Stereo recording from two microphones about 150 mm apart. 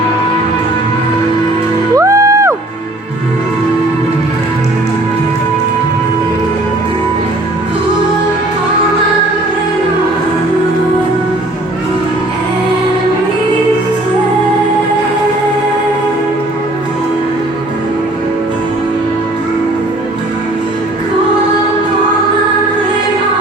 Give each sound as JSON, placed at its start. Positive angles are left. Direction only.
{"t": 2.0, "sound": "music", "side_deg": -20}